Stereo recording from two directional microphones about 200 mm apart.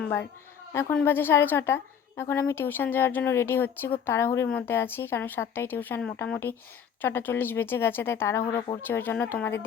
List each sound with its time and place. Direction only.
0.0 s a woman's voice: 10° left (ahead or behind)
8.5 s speech: 25° left (ahead or behind)
8.9 s a woman's voice: 10° left (ahead or behind)